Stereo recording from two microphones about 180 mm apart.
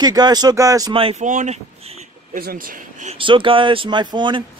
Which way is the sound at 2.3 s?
55° right (ahead or behind).